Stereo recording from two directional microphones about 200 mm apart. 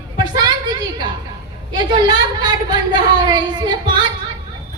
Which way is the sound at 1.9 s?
20° right (ahead or behind).